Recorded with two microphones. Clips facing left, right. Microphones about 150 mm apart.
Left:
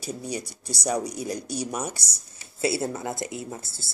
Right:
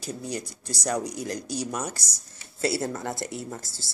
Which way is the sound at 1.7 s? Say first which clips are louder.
Left 1 dB; 15° left (ahead or behind).